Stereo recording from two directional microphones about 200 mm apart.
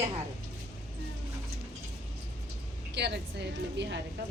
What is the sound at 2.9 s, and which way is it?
Speech, 60° right (ahead or behind).